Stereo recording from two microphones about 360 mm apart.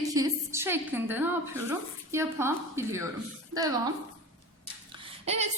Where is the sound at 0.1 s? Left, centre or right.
Centre.